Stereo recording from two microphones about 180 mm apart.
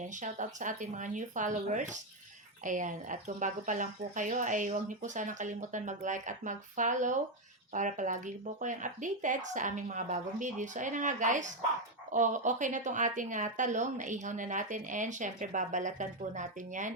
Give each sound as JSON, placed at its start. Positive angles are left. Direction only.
{"t": 0.1, "sound": "speech", "side_deg": -45}